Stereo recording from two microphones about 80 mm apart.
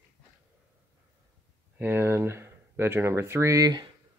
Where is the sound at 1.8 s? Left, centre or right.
Right.